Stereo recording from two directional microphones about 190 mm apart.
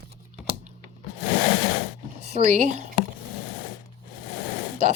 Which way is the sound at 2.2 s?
35° right (ahead or behind).